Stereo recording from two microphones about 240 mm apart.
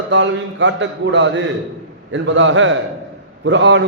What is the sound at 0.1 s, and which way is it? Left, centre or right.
A man's voice, right.